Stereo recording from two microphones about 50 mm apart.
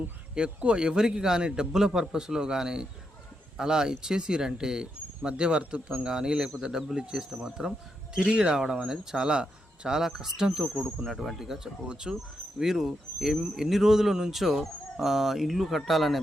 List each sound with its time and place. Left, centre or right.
0.3 s speech: centre
11.0 s speech: centre
12.5 s speech: centre